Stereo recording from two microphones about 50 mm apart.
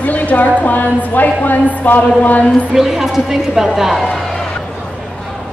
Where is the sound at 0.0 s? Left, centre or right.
Left.